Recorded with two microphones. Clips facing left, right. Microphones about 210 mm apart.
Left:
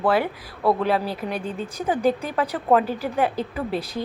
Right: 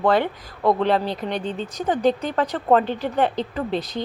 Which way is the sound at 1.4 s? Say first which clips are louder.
Right 2 dB; 30° right (ahead or behind).